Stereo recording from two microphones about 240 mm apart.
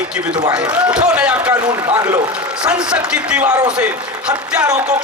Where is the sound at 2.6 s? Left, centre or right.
Centre.